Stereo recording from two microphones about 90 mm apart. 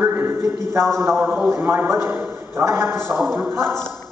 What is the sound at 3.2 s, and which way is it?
Speech, 5° left (ahead or behind).